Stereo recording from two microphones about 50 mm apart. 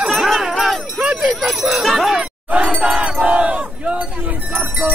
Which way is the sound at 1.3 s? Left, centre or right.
Centre.